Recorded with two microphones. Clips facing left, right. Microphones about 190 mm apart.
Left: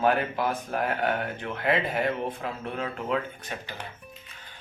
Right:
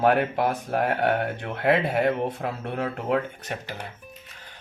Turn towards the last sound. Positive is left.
turn(degrees=-70)  # may be behind; listen again after turning